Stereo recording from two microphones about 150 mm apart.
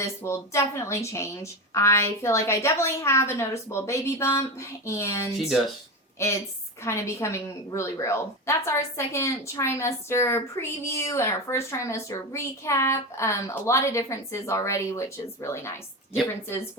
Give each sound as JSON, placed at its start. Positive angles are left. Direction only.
{"t": 0.0, "sound": "a woman's voice", "side_deg": 20}